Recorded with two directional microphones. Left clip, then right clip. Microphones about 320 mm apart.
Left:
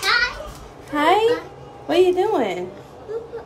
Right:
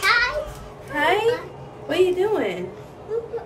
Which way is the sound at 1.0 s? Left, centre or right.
Left.